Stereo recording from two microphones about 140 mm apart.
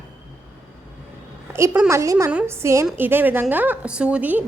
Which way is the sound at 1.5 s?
20° right (ahead or behind).